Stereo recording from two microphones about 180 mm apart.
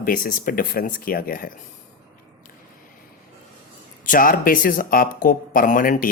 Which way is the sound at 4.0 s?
50° left (ahead or behind).